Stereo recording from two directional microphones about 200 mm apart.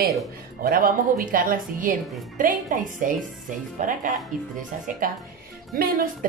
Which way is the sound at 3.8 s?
40° right (ahead or behind).